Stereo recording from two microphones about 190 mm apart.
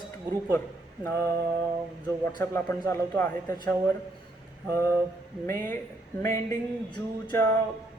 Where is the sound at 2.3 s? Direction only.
10° left (ahead or behind).